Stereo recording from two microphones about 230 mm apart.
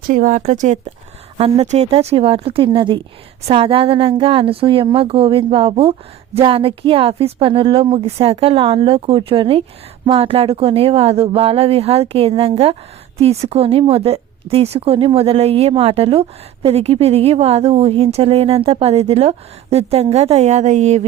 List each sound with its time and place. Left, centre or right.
0.1 s a woman's voice: right